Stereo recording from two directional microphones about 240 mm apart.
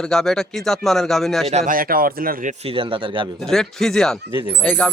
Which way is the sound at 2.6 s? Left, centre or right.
Right.